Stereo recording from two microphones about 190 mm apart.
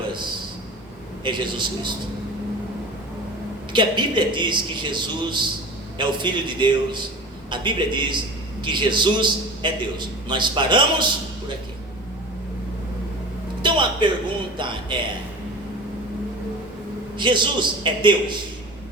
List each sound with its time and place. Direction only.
1.2 s a man's voice: 25° right (ahead or behind)
3.7 s a man's voice: 25° right (ahead or behind)
13.6 s a sound: 25° right (ahead or behind)
14.6 s a man's voice: 25° right (ahead or behind)
17.2 s a man's voice: 25° right (ahead or behind)